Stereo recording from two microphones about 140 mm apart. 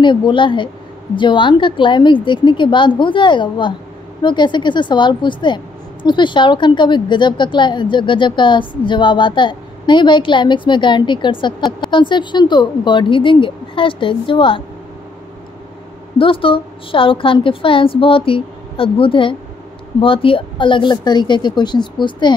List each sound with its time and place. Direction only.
0.0 s a woman's voice: 35° left (ahead or behind)
16.2 s a woman's voice: 40° left (ahead or behind)